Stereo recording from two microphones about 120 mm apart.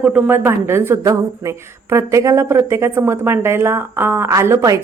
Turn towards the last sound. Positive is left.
turn(degrees=-25)  # may be behind; listen again after turning